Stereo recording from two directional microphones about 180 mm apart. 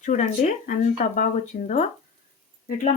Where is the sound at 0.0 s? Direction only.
40° left (ahead or behind).